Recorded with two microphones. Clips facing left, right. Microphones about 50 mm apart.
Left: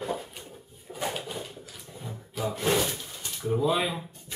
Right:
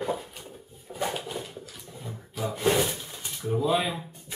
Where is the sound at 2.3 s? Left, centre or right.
Centre.